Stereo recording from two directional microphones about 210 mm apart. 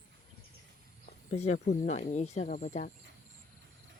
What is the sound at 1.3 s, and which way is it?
Speech, 30° left (ahead or behind).